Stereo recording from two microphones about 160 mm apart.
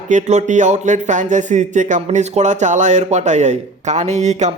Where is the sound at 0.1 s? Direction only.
45° right (ahead or behind).